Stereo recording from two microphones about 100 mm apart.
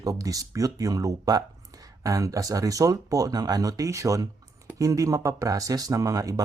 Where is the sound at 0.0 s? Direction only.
35° right (ahead or behind).